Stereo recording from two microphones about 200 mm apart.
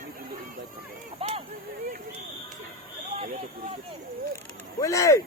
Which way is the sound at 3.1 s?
30° right (ahead or behind).